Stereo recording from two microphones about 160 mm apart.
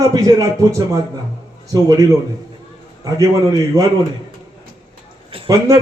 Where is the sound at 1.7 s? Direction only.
20° right (ahead or behind).